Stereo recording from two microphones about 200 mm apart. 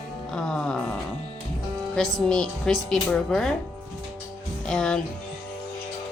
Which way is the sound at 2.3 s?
5° left (ahead or behind).